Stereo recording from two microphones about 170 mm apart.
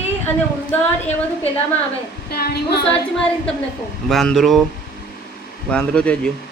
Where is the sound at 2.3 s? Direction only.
70° left (ahead or behind).